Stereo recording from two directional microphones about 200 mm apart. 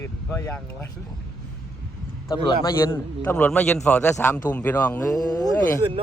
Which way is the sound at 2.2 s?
20° left (ahead or behind).